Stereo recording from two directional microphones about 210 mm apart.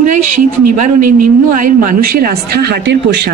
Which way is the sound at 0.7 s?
40° right (ahead or behind).